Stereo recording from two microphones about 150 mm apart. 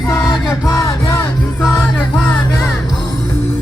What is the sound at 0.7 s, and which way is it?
Music, 20° left (ahead or behind).